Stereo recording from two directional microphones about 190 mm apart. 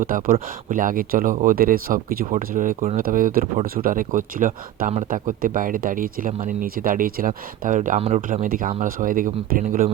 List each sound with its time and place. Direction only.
0.0 s speech: 45° right (ahead or behind)